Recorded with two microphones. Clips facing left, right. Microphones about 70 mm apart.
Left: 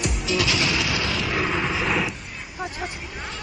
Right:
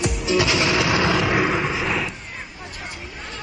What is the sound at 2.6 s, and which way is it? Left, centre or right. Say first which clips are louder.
Hubbub: left 4 dB; centre.